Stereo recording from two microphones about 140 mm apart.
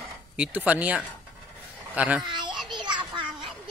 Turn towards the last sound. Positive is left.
turn(degrees=-35)  # may be behind; listen again after turning